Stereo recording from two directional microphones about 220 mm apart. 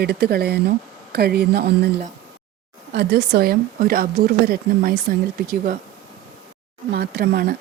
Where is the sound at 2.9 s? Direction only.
50° right (ahead or behind).